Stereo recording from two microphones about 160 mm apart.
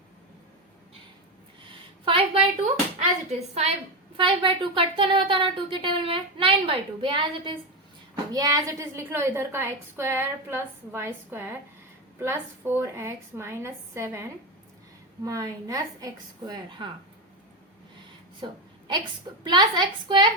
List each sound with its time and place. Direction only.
2.0 s a sound: 35° right (ahead or behind)
3.2 s a woman's voice: 45° right (ahead or behind)
4.2 s speech: 30° right (ahead or behind)
8.3 s a woman's voice: 20° right (ahead or behind)
18.4 s a woman's voice: 30° right (ahead or behind)